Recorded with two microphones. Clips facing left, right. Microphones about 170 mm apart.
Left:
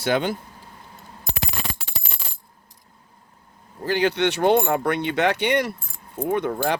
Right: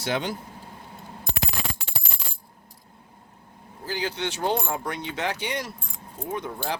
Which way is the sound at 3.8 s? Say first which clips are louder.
Left 9 dB; 65° left (ahead or behind).